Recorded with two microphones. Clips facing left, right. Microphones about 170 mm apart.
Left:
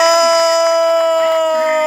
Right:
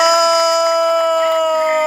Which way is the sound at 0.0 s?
Centre (ahead or behind).